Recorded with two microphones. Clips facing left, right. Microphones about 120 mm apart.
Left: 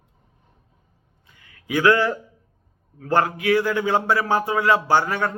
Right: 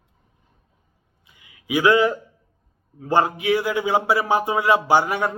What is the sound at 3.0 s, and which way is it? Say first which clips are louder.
A man's voice: right 1 dB; 20° right (ahead or behind).